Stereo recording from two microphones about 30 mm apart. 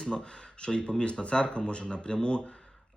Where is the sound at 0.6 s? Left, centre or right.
Left.